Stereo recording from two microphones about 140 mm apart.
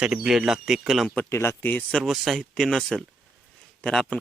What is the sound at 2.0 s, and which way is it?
Speech, centre (ahead or behind).